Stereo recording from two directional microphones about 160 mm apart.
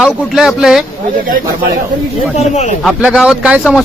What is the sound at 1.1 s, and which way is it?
Speech, 60° right (ahead or behind).